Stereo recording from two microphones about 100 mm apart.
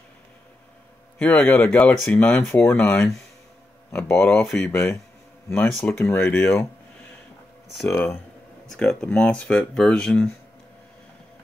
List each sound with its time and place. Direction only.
1.2 s speech: 15° left (ahead or behind)
7.9 s speech: 20° left (ahead or behind)
8.6 s speech: 10° left (ahead or behind)